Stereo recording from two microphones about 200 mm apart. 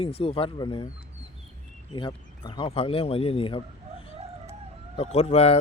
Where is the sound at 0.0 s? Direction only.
30° left (ahead or behind).